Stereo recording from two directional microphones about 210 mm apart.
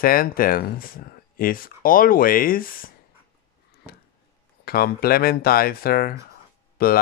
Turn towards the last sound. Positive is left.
turn(degrees=45)  # may be behind; listen again after turning